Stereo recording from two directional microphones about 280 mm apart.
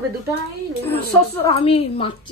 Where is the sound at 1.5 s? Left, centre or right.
Left.